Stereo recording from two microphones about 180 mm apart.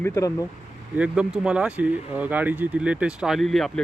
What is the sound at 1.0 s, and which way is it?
Speech, 5° right (ahead or behind).